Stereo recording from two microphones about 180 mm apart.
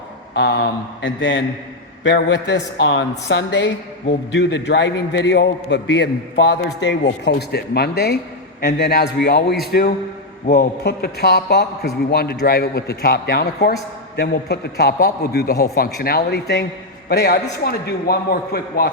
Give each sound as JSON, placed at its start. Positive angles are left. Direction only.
{"t": 0.3, "sound": "a woman's voice", "side_deg": 65}